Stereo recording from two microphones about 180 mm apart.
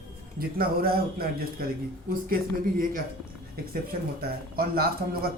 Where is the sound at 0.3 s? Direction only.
55° right (ahead or behind).